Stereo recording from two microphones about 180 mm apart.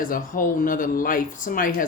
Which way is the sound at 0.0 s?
50° left (ahead or behind).